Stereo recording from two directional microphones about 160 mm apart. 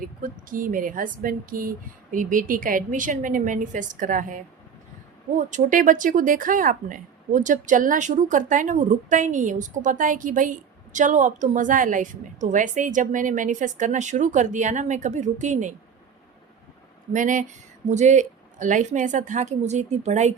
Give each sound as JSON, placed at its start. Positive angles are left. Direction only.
{"t": 0.2, "sound": "speech", "side_deg": -60}
{"t": 5.5, "sound": "speech", "side_deg": -55}
{"t": 17.1, "sound": "speech", "side_deg": -55}